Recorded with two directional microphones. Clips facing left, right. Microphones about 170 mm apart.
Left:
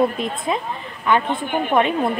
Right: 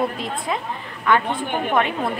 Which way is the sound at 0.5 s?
20° left (ahead or behind).